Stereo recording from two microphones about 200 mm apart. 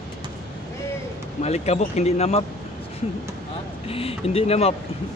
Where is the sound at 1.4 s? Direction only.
35° left (ahead or behind).